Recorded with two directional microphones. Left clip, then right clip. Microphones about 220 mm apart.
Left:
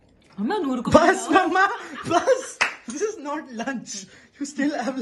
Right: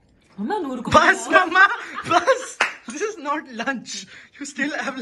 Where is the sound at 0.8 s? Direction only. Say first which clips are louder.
Right 2 dB; 15° left (ahead or behind).